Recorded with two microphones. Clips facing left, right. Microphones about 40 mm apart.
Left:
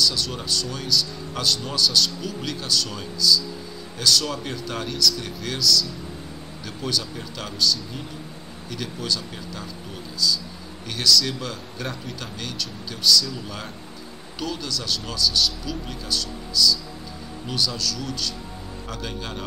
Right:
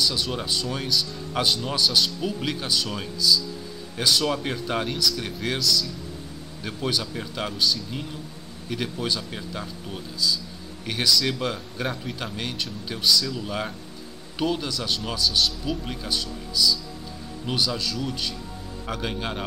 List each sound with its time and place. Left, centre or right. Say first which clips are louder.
0.0 s speech: left 1 dB; right
10.9 s speech: left 1 dB; centre